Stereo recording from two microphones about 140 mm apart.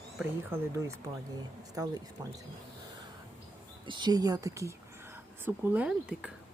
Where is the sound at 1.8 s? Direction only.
25° right (ahead or behind).